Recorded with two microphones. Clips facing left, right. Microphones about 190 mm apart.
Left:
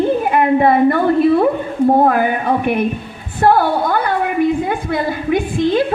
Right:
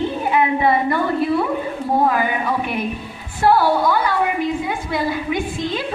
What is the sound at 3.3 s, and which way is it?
A woman's voice, 50° left (ahead or behind).